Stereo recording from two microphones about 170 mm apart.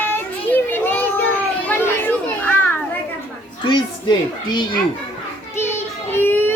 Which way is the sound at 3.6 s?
25° left (ahead or behind).